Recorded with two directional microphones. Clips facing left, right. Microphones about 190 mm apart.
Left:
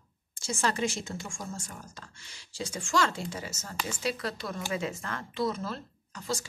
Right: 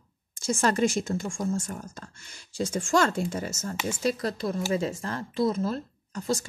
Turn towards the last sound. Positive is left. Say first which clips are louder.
# right 6 dB
turn(degrees=-45)  # may be behind; listen again after turning